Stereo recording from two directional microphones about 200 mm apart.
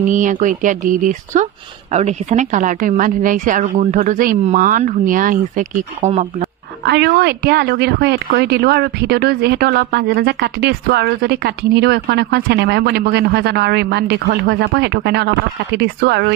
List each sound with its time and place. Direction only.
0.1 s speech: 40° right (ahead or behind)
6.8 s speech: 55° right (ahead or behind)